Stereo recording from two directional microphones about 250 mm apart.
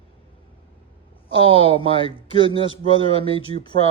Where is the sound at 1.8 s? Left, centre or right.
Left.